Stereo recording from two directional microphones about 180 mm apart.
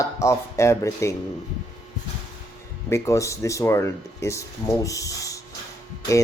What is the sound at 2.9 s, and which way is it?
Speech, 15° left (ahead or behind).